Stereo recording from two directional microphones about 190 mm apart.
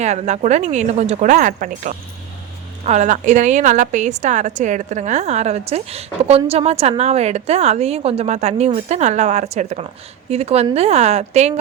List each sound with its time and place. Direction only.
0.0 s a woman's voice: 35° right (ahead or behind)